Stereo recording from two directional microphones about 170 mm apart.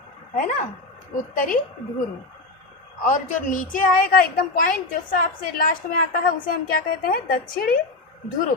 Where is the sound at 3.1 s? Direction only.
50° left (ahead or behind).